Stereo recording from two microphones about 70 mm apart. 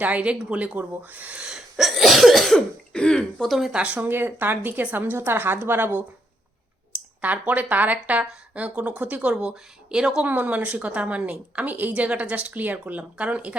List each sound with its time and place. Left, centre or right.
0.0 s a woman's voice: centre
1.4 s cough: centre
3.7 s a woman's voice: centre
7.2 s a woman's voice: right
10.2 s a woman's voice: right